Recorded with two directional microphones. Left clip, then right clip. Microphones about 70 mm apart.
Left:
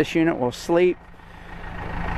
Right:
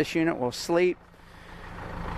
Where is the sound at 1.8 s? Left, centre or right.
Left.